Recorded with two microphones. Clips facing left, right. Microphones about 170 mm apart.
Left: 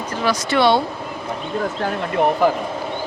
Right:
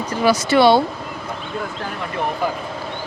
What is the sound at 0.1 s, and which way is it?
Speech, 10° right (ahead or behind).